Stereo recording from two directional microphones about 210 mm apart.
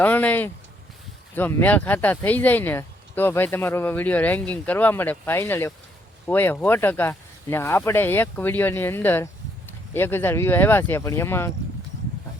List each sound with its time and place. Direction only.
0.0 s speech: 5° left (ahead or behind)